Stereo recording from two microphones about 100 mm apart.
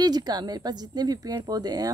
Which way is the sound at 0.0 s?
45° right (ahead or behind).